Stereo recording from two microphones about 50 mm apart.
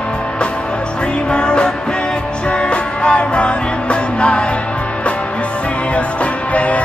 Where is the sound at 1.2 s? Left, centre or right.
Centre.